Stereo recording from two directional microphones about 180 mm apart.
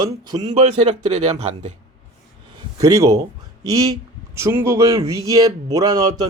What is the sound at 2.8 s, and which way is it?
A man's voice, 20° right (ahead or behind).